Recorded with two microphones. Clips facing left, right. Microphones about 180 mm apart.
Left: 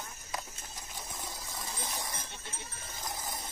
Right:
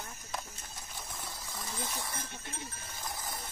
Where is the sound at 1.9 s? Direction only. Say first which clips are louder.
Even; 15° left (ahead or behind).